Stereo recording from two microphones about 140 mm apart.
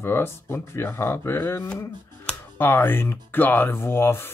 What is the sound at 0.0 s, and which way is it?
Speech, 15° left (ahead or behind).